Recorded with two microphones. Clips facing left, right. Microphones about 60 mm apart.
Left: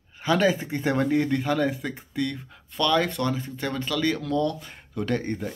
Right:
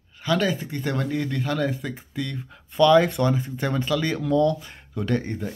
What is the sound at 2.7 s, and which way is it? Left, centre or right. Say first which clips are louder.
Speech: right 7 dB; centre.